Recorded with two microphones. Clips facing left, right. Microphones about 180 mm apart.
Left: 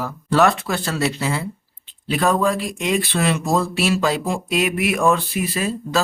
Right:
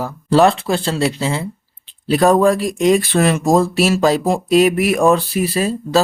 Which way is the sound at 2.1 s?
40° right (ahead or behind).